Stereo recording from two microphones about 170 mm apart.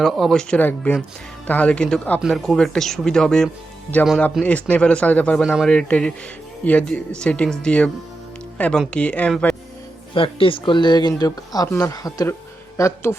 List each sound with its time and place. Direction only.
0.0 s speech: centre (ahead or behind)
10.2 s speech: 30° left (ahead or behind)